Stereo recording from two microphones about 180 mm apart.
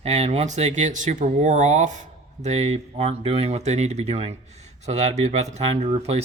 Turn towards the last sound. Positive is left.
turn(degrees=-35)  # may be behind; listen again after turning